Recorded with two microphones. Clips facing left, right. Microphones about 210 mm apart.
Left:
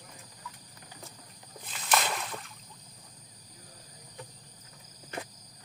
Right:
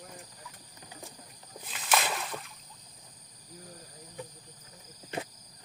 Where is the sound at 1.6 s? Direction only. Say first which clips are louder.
Even; centre (ahead or behind).